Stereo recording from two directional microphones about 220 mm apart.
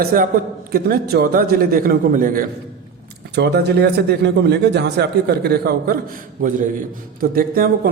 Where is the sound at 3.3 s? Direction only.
50° right (ahead or behind).